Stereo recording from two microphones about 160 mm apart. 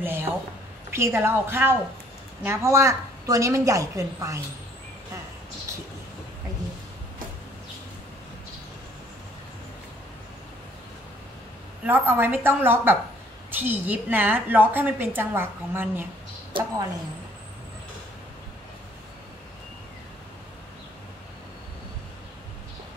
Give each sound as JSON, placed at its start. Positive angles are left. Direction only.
{"t": 0.0, "sound": "a sound", "side_deg": -15}
{"t": 0.8, "sound": "a woman's voice", "side_deg": -15}
{"t": 5.7, "sound": "vehicle", "side_deg": -20}
{"t": 11.8, "sound": "a woman's voice", "side_deg": -15}